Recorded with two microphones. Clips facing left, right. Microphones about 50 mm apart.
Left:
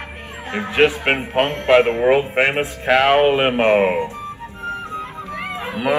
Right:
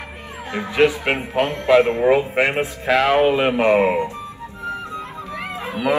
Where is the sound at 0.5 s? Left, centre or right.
Left.